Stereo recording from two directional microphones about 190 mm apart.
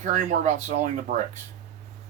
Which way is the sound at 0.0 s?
40° right (ahead or behind).